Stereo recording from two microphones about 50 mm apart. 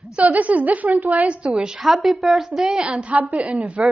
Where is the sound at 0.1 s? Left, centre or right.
Right.